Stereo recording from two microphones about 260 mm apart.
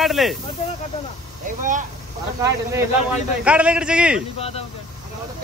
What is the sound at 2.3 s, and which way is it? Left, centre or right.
A man's voice, centre.